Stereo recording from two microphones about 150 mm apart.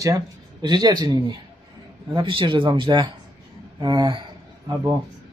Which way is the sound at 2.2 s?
35° right (ahead or behind).